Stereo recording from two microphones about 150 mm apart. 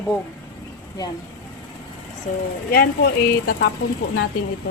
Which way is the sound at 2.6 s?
85° left.